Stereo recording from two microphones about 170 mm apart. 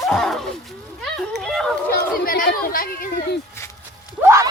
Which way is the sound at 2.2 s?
55° left (ahead or behind).